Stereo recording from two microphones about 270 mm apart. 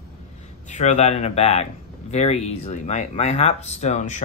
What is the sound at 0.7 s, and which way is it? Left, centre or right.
Speech, left.